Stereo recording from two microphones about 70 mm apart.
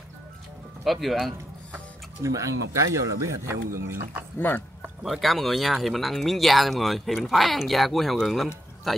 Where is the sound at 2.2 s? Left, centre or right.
Right.